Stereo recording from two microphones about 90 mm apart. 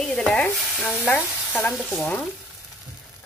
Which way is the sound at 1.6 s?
5° left (ahead or behind).